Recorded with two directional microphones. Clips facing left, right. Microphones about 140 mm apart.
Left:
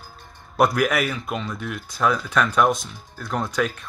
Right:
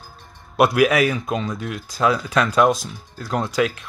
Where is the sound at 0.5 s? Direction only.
10° right (ahead or behind).